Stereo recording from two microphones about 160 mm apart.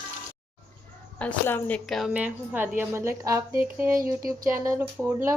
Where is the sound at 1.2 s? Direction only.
10° left (ahead or behind).